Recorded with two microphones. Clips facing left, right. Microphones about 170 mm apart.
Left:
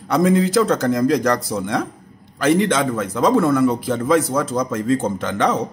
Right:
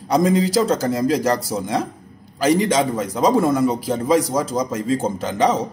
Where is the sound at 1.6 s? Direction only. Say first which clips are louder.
Even; 30° right (ahead or behind).